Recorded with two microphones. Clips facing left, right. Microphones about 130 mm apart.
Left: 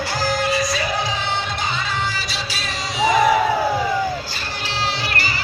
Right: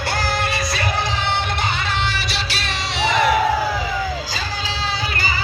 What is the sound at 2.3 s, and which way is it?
Music, 70° right (ahead or behind).